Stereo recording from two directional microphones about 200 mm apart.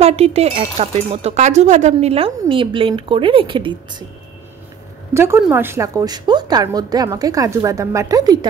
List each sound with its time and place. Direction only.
0.0 s speech: 30° right (ahead or behind)
5.1 s a woman's voice: 10° right (ahead or behind)